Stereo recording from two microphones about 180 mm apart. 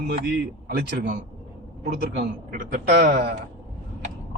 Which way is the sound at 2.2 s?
50° right (ahead or behind).